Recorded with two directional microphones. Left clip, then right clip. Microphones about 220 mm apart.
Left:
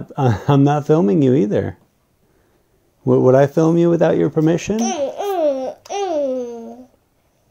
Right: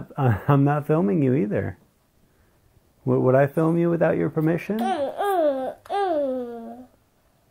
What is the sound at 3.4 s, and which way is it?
Speech, 45° left (ahead or behind).